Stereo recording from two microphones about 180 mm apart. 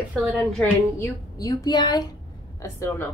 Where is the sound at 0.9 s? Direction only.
15° left (ahead or behind).